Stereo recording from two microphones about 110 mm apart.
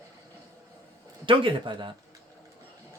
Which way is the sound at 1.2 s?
50° right (ahead or behind).